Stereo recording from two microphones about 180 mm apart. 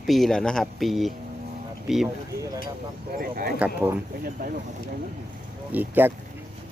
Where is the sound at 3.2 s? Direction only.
55° right (ahead or behind).